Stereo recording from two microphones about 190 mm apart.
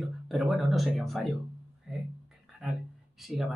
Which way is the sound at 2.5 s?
Centre (ahead or behind).